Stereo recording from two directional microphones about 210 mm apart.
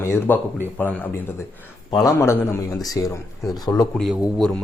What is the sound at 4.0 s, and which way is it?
Speech, centre (ahead or behind).